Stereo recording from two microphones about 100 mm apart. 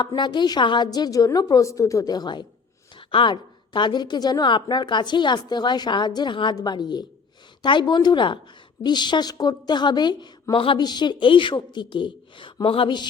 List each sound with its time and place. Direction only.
0.2 s a woman's voice: 50° left (ahead or behind)
3.1 s a woman's voice: 55° left (ahead or behind)
10.5 s a woman's voice: 60° left (ahead or behind)
10.8 s a woman's voice: 45° left (ahead or behind)